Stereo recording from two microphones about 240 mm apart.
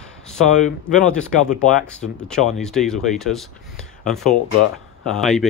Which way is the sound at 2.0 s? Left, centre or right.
Centre.